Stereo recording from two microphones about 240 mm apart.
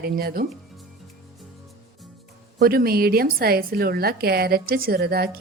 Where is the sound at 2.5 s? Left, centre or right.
Right.